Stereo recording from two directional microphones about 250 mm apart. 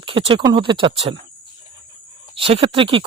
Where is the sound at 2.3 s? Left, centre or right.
Right.